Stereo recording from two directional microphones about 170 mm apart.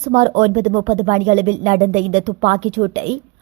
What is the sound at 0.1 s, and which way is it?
A woman's voice, 40° right (ahead or behind).